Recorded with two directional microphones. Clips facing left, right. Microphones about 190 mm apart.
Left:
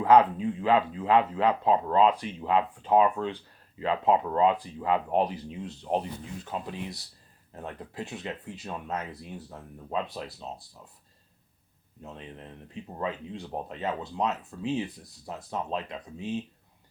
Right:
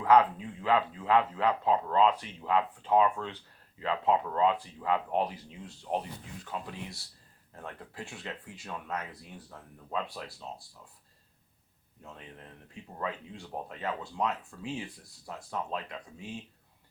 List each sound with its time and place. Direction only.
0.0 s speech: 25° left (ahead or behind)
12.0 s speech: 20° left (ahead or behind)